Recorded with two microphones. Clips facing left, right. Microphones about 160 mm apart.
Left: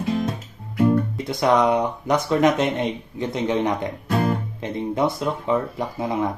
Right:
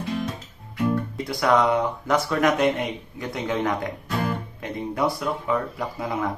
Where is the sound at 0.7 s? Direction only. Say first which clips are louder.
Left 5 dB; 45° left (ahead or behind).